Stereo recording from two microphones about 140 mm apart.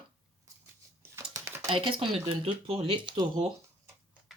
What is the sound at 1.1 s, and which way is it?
Typing, 20° right (ahead or behind).